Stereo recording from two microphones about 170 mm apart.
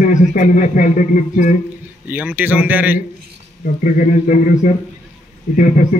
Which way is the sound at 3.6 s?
50° left (ahead or behind).